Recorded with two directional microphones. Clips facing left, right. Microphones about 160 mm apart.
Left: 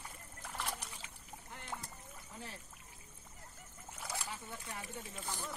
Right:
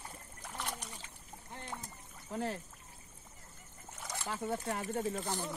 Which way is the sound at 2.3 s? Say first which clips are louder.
Right 14 dB; 60° right (ahead or behind).